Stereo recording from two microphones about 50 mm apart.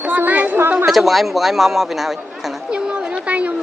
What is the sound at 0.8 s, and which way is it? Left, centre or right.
Speech, centre.